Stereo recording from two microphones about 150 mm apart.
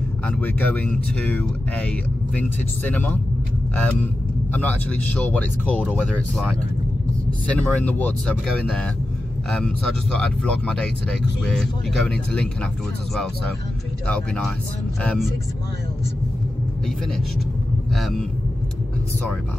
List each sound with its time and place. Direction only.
0.3 s speech: 10° left (ahead or behind)
10.1 s speech: 5° left (ahead or behind)
14.0 s speech: 5° left (ahead or behind)
17.9 s speech: centre (ahead or behind)